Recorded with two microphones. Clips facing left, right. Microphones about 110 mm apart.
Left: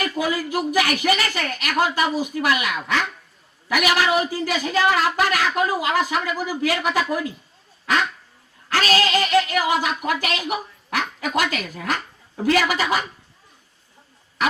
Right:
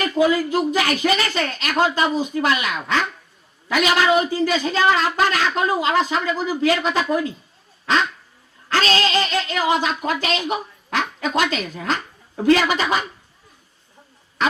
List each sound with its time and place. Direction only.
0.0 s speech: 25° right (ahead or behind)